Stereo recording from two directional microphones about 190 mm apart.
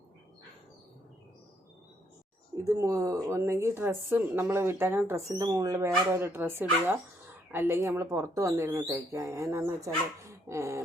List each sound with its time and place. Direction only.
2.6 s a woman's voice: 20° right (ahead or behind)